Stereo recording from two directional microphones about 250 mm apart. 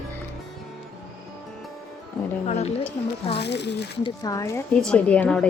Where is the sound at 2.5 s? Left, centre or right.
Left.